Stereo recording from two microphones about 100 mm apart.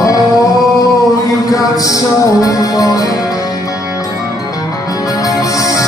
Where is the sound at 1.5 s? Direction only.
35° left (ahead or behind).